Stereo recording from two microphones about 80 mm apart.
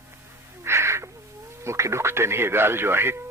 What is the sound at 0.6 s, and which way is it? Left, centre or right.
Owl, right.